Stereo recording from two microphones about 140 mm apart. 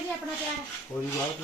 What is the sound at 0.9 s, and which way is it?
Filing, 20° left (ahead or behind).